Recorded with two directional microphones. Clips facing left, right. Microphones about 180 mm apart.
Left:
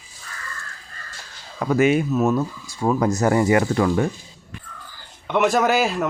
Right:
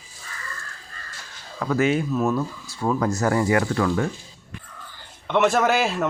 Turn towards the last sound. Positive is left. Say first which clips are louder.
# left 2 dB
turn(degrees=0)  # may be behind; listen again after turning